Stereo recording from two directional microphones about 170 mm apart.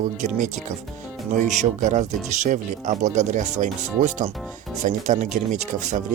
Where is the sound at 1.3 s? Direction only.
45° right (ahead or behind).